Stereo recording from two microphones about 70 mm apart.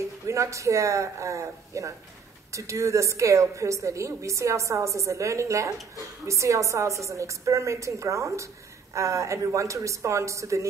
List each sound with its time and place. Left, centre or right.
0.3 s a woman's voice: right